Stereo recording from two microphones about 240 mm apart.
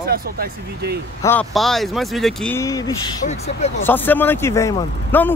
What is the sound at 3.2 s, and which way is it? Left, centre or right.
Speech, left.